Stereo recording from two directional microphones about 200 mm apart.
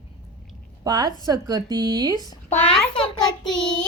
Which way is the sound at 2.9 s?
25° left (ahead or behind).